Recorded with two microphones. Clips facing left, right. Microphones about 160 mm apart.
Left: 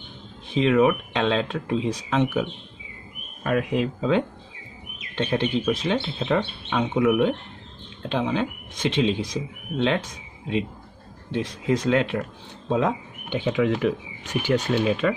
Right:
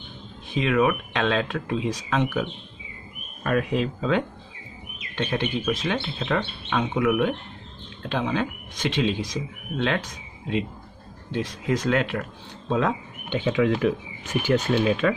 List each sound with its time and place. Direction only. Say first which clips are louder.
0.6 s speech: left 3 dB; 25° left (ahead or behind)
3.4 s speech: left 1 dB; 15° left (ahead or behind)
5.1 s speech: left 3 dB; 25° left (ahead or behind)
11.3 s speech: left 2 dB; 25° left (ahead or behind)
13.5 s speech: even; centre (ahead or behind)